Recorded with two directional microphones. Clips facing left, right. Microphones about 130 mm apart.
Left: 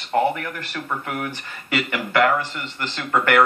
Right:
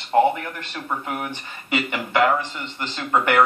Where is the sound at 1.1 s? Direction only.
20° right (ahead or behind).